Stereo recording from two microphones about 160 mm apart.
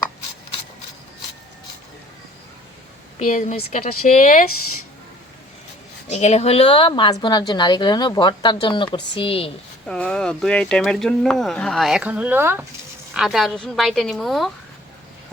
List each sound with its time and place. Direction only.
3.2 s speech: 50° left (ahead or behind)
6.1 s a woman's voice: 45° left (ahead or behind)
9.8 s speech: 5° left (ahead or behind); by 12.6 s 15° right (ahead or behind)
13.1 s speech: 5° right (ahead or behind)